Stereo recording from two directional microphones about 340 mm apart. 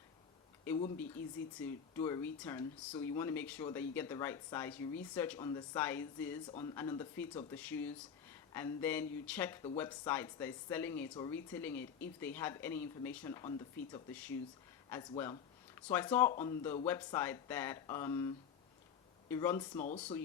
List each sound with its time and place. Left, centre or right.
1.2 s speech: centre
19.7 s speech: left